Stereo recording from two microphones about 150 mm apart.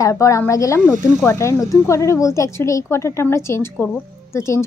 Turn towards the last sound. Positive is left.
turn(degrees=20)  # may be behind; listen again after turning